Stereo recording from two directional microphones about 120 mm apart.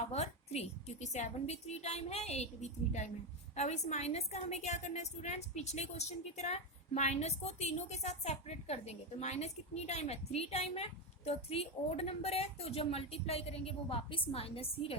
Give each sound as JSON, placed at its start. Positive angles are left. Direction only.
{"t": 0.1, "sound": "a woman's voice", "side_deg": 60}